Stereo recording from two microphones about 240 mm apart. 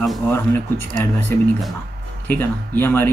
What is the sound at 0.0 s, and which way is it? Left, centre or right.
Speech, centre.